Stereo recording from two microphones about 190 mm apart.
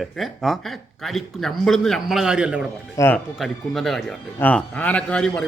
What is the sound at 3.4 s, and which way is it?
A man's voice, centre (ahead or behind).